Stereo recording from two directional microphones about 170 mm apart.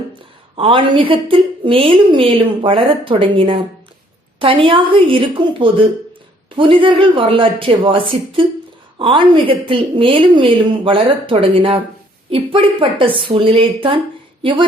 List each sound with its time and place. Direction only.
0.1 s a woman's voice: 30° right (ahead or behind)